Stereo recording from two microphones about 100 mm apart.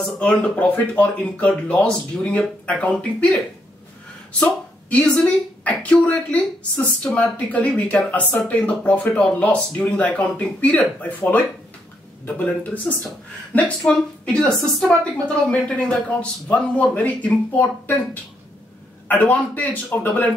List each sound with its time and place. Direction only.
0.0 s speech: 10° left (ahead or behind)